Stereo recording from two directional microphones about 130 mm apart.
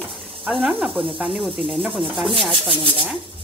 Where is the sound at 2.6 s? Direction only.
40° right (ahead or behind).